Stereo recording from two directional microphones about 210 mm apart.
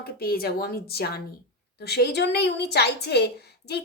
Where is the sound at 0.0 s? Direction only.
45° left (ahead or behind).